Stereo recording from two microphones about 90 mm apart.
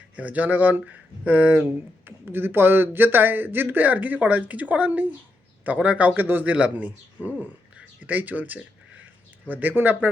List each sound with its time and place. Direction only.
0.2 s speech: 15° right (ahead or behind)